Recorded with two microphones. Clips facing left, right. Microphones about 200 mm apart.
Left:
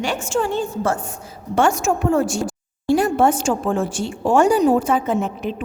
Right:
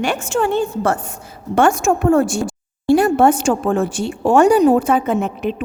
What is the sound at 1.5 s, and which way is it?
A woman's voice, 55° right (ahead or behind).